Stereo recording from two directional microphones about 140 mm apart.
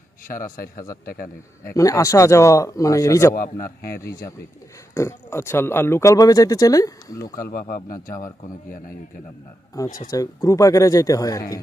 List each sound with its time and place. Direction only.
0.3 s a man's voice: 80° left
1.7 s speech: 25° left (ahead or behind)
3.3 s speech: 90° left
4.9 s speech: 20° left (ahead or behind)
7.3 s speech: 85° left
9.7 s speech: 25° left (ahead or behind)